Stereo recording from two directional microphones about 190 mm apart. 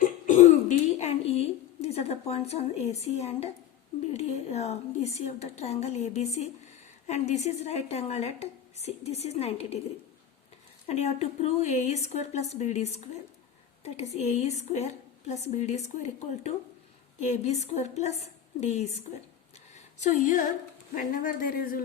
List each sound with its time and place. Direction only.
0.0 s cough: 40° left (ahead or behind)
4.1 s a woman's voice: 35° left (ahead or behind)
10.8 s a woman's voice: 35° left (ahead or behind)
19.7 s a sound: 35° left (ahead or behind)
20.9 s speech: 45° left (ahead or behind)